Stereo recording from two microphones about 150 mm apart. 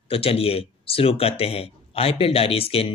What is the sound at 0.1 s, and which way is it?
Speech, 40° left (ahead or behind).